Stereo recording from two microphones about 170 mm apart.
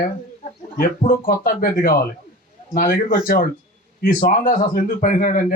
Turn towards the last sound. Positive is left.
turn(degrees=55)  # may be behind; listen again after turning